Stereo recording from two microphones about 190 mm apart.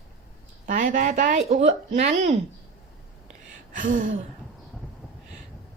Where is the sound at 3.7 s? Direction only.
45° right (ahead or behind).